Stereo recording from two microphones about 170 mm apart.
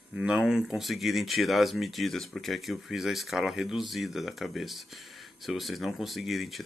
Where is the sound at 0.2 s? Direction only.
5° right (ahead or behind).